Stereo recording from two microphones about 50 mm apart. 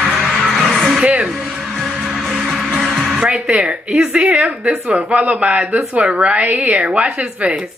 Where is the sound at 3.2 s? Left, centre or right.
Right.